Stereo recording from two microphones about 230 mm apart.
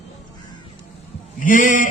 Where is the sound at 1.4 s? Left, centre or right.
Left.